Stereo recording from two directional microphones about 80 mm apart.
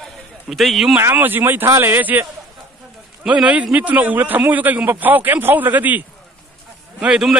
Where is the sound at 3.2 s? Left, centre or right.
Centre.